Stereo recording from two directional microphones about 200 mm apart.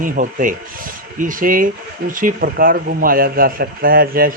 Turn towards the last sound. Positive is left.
turn(degrees=-45)  # may be behind; listen again after turning